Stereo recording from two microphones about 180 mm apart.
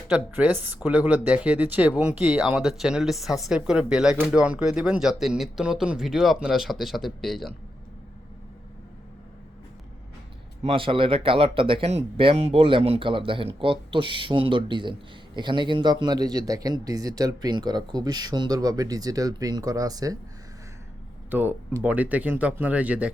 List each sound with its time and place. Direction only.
0.1 s speech: 10° right (ahead or behind)
10.6 s a man's voice: 30° right (ahead or behind)
21.2 s speech: 10° right (ahead or behind)